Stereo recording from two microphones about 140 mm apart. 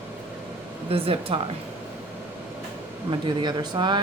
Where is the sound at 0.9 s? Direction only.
40° right (ahead or behind).